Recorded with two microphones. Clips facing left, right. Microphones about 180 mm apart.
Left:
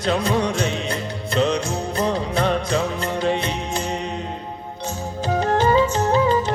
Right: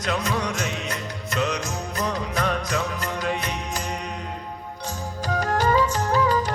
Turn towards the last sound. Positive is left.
turn(degrees=25)  # may be behind; listen again after turning